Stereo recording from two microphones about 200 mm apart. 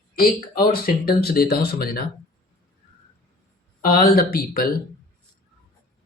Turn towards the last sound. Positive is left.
turn(degrees=45)  # may be behind; listen again after turning